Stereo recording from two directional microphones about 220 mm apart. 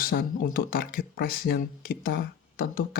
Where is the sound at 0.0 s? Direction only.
40° left (ahead or behind).